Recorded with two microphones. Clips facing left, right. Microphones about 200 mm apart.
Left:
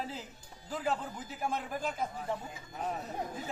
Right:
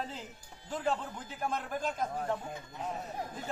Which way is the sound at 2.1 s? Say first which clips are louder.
Right 3 dB; 50° right (ahead or behind).